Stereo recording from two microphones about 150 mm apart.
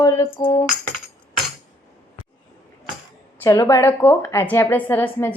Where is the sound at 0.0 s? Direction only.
25° left (ahead or behind).